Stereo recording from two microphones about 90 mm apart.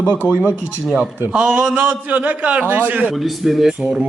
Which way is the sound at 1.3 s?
5° right (ahead or behind).